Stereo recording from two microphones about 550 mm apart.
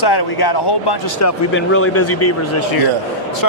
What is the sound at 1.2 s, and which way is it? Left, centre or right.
Speech, left.